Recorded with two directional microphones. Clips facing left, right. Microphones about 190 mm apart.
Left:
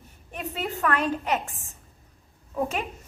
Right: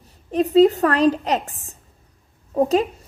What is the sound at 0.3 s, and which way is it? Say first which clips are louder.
A woman's voice: right 18 dB; 35° right (ahead or behind).